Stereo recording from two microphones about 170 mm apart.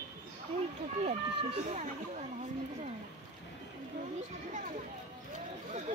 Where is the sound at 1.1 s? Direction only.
40° right (ahead or behind).